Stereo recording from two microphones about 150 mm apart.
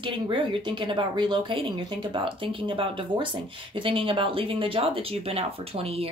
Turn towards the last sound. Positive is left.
turn(degrees=-40)  # may be behind; listen again after turning